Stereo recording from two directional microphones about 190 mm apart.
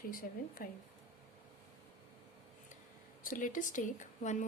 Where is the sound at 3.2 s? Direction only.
45° left (ahead or behind).